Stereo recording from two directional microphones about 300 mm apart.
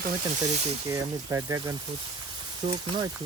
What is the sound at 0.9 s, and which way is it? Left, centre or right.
Speech, centre.